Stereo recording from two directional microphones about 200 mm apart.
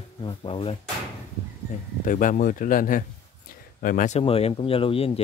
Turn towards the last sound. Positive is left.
turn(degrees=25)  # may be behind; listen again after turning